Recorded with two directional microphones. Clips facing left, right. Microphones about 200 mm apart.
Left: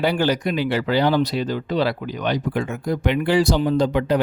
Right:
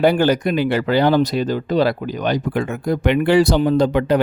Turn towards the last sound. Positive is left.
turn(degrees=-60)  # may be behind; listen again after turning